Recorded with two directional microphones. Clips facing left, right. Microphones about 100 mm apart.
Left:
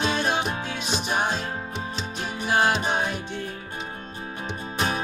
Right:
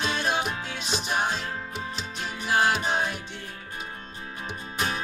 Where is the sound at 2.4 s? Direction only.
20° left (ahead or behind).